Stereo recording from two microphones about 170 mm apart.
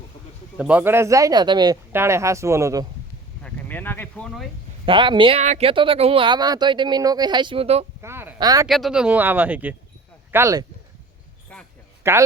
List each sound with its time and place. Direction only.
0.5 s speech: 5° right (ahead or behind)
3.4 s a sound: 10° left (ahead or behind)
4.9 s speech: 30° right (ahead or behind)
5.4 s speech: 40° right (ahead or behind)
8.0 s a sound: 15° right (ahead or behind)
8.4 s speech: 20° right (ahead or behind)
8.6 s speech: centre (ahead or behind); by 10.7 s 20° right (ahead or behind)
11.5 s a sound: 5° left (ahead or behind)
12.0 s speech: 15° right (ahead or behind)